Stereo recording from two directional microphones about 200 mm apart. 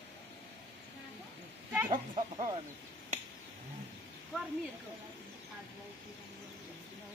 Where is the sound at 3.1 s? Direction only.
35° right (ahead or behind).